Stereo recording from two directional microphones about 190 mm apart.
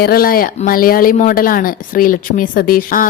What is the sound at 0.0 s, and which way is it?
Speech, 55° left (ahead or behind).